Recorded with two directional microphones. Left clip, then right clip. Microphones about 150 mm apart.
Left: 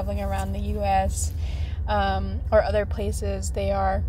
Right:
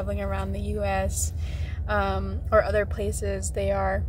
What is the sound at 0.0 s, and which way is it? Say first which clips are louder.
A woman's voice: left 1 dB; 25° right (ahead or behind).